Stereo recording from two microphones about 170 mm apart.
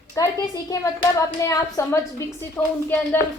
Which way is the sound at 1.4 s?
20° left (ahead or behind).